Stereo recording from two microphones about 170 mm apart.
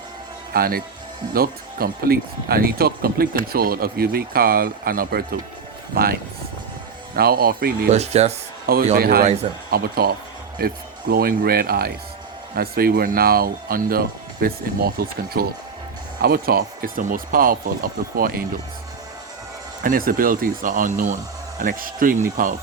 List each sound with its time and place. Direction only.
0.5 s speech: 60° right (ahead or behind)
7.2 s speech: 60° right (ahead or behind)
7.9 s speech: 40° right (ahead or behind)
8.6 s a man's voice: 60° right (ahead or behind)
19.8 s speech: 55° right (ahead or behind)